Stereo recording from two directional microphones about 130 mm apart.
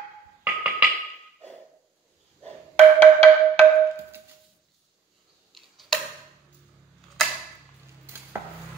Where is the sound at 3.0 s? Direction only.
50° right (ahead or behind).